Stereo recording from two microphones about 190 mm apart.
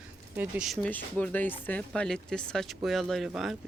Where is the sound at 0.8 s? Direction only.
10° left (ahead or behind).